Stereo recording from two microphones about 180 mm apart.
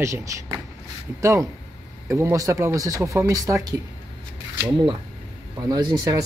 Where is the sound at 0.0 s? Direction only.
15° right (ahead or behind).